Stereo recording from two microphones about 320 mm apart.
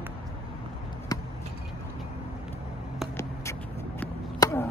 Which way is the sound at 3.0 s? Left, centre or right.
Centre.